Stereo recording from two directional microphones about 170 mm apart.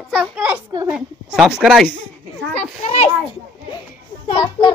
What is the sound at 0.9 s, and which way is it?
Speech, 5° right (ahead or behind).